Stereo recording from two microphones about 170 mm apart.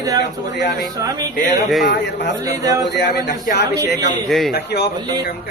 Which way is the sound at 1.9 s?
90° left.